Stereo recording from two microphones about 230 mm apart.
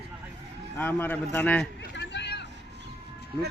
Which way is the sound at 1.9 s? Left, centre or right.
Left.